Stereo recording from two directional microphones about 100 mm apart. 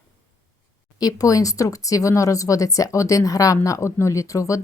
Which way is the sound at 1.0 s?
35° left (ahead or behind).